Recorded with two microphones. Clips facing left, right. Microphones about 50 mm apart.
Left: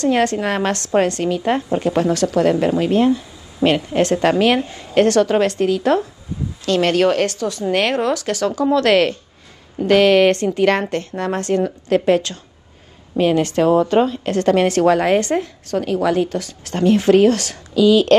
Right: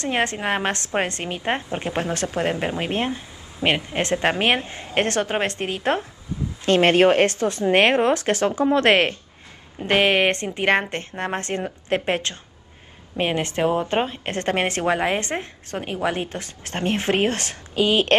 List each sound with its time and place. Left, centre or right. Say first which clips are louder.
0.0 s a woman's voice: left 6 dB; right